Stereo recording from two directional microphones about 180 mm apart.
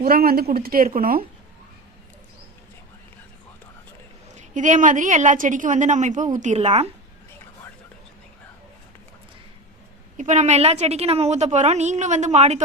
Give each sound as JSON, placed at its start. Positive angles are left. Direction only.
{"t": 0.0, "sound": "a woman's voice", "side_deg": -55}
{"t": 4.4, "sound": "a woman's voice", "side_deg": -45}
{"t": 10.2, "sound": "a woman's voice", "side_deg": -40}